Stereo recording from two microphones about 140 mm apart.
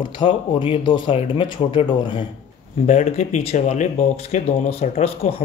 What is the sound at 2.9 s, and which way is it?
Speech, 55° left (ahead or behind).